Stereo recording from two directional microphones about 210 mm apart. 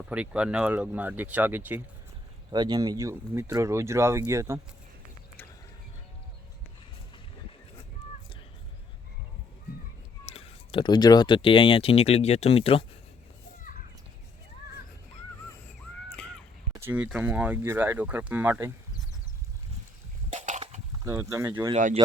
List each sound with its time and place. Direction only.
0.1 s speech: 5° right (ahead or behind)
2.5 s speech: 20° right (ahead or behind)
10.2 s speech: 25° left (ahead or behind)
16.1 s caw: 5° left (ahead or behind)
16.8 s speech: 5° right (ahead or behind)
20.3 s a sound: 35° right (ahead or behind)
21.0 s speech: 15° right (ahead or behind)
21.7 s speech: 35° right (ahead or behind)